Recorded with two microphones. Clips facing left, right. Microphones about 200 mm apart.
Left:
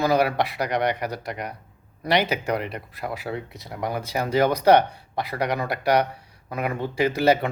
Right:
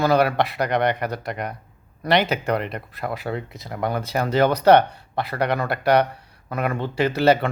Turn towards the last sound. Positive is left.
turn(degrees=10)  # may be behind; listen again after turning